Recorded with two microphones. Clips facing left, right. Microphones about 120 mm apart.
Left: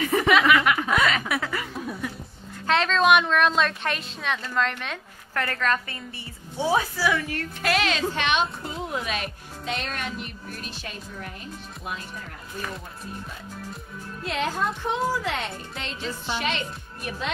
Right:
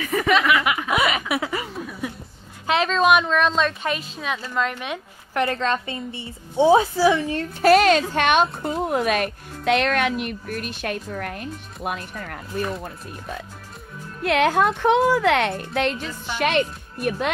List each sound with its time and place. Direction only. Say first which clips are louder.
0.0 s chuckle: left 1 dB; 25° left (ahead or behind)
0.3 s chuckle: right 1 dB; centre (ahead or behind)
2.6 s a woman's voice: right 2 dB; 5° right (ahead or behind); by 7.4 s 25° right (ahead or behind)
7.6 s speech: right 10 dB; 45° right (ahead or behind); by 12.6 s 60° right (ahead or behind)
14.2 s speech: right 8 dB; 65° right (ahead or behind)